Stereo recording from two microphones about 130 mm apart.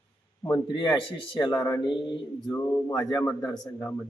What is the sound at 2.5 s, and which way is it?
Speech, 20° left (ahead or behind).